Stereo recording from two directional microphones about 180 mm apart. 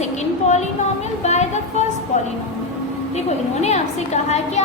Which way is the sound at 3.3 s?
40° left (ahead or behind).